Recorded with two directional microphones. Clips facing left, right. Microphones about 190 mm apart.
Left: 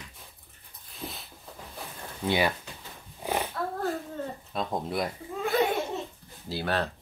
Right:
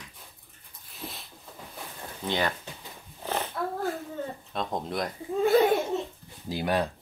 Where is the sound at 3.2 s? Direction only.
15° left (ahead or behind).